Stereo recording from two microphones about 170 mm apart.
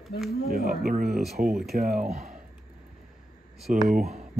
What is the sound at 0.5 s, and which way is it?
Speech, 60° right (ahead or behind).